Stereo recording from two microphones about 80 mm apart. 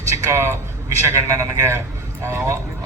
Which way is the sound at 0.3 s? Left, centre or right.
Right.